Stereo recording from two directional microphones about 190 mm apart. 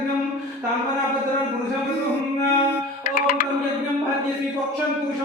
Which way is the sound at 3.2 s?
45° left (ahead or behind).